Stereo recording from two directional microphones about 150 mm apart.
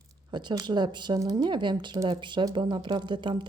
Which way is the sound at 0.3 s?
30° right (ahead or behind).